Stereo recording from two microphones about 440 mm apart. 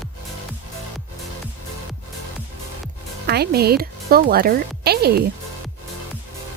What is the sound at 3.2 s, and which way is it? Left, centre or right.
Speech, right.